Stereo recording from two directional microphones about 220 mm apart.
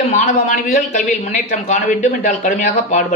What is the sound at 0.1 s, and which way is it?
A man's voice, 35° left (ahead or behind).